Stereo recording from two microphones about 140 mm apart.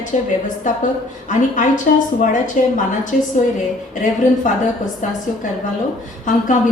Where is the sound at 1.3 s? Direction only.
65° left (ahead or behind).